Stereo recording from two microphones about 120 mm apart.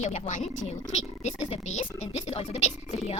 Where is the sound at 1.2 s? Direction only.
75° left (ahead or behind).